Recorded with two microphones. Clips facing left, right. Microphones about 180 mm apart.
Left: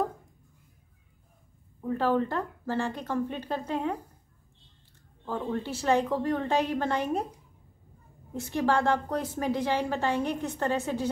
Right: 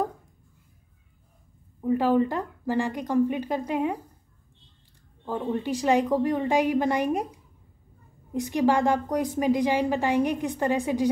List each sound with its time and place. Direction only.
1.8 s a woman's voice: 15° right (ahead or behind)
5.2 s a woman's voice: 15° right (ahead or behind)